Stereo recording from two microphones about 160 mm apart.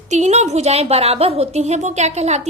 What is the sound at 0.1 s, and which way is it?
A woman's voice, 45° right (ahead or behind).